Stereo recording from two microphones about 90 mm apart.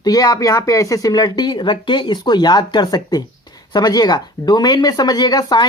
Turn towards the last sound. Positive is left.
turn(degrees=50)  # may be behind; listen again after turning